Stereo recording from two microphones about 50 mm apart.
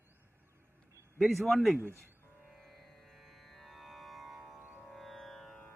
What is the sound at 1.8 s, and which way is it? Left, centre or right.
Speech, right.